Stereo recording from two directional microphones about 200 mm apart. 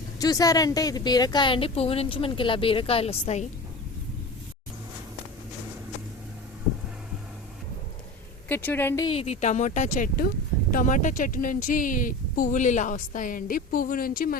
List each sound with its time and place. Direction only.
0.2 s a woman's voice: 20° left (ahead or behind)
8.4 s a woman's voice: 10° left (ahead or behind)
9.0 s speech: 30° left (ahead or behind); by 14.3 s 45° left (ahead or behind)